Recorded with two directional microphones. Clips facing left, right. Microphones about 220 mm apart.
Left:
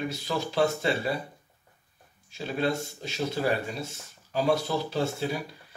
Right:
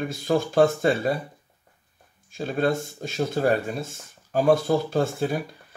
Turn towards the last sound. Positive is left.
turn(degrees=-50)  # may be behind; listen again after turning